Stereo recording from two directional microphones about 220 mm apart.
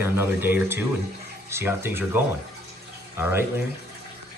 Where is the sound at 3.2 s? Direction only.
10° right (ahead or behind).